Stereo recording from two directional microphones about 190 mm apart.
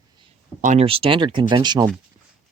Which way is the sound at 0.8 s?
30° right (ahead or behind).